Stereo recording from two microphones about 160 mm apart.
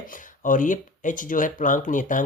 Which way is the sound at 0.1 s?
55° left (ahead or behind).